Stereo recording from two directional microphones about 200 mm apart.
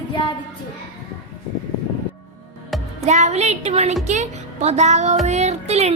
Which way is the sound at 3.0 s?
35° right (ahead or behind).